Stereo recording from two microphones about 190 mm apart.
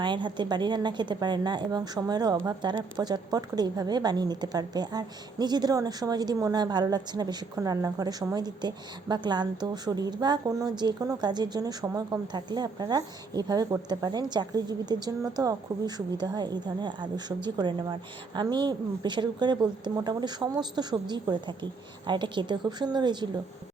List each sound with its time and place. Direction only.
0.0 s a woman's voice: 25° right (ahead or behind)